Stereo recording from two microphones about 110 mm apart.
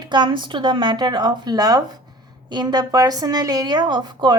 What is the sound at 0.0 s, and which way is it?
A woman's voice, 40° right (ahead or behind).